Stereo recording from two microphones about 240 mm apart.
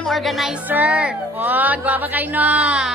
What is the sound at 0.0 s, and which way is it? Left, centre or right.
Music, centre.